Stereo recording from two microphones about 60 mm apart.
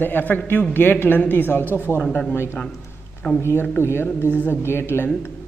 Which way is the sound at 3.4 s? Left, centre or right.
Left.